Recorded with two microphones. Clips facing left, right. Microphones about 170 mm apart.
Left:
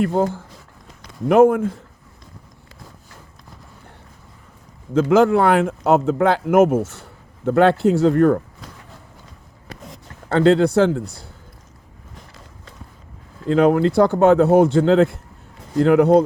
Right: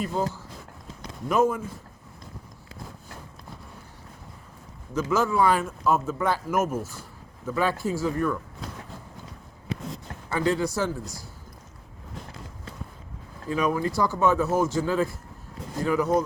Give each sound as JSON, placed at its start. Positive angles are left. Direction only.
{"t": 0.0, "sound": "speech", "side_deg": 60}
{"t": 4.9, "sound": "speech", "side_deg": 60}
{"t": 6.8, "sound": "speech", "side_deg": 70}
{"t": 10.2, "sound": "speech", "side_deg": 65}
{"t": 13.5, "sound": "speech", "side_deg": 70}